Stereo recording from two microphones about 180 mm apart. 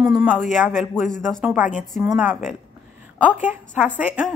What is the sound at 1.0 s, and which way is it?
Speech, 45° left (ahead or behind).